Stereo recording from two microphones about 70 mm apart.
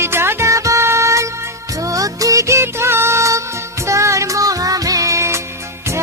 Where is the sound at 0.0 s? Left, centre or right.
Right.